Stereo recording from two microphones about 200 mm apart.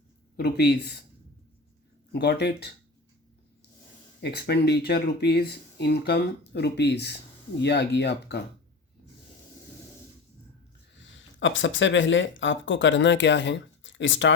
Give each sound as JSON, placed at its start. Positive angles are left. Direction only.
{"t": 0.3, "sound": "speech", "side_deg": 55}
{"t": 2.1, "sound": "speech", "side_deg": 55}
{"t": 4.2, "sound": "speech", "side_deg": 55}
{"t": 11.0, "sound": "speech", "side_deg": 65}